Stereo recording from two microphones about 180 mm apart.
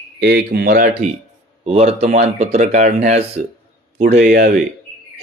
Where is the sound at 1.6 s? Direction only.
35° right (ahead or behind).